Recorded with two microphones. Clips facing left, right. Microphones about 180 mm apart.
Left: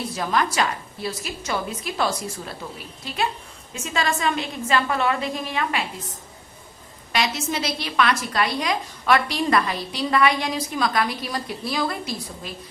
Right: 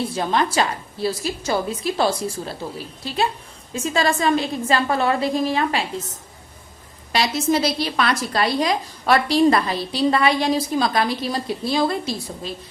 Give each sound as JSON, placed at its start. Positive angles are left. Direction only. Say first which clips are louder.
{"t": 0.0, "sound": "a woman's voice", "louder": "right 3 dB", "side_deg": -30}